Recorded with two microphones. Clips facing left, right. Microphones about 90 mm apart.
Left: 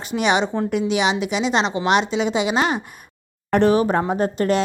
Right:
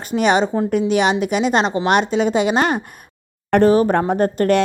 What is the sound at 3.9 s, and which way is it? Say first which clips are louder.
Speech: right 3 dB; 50° right (ahead or behind).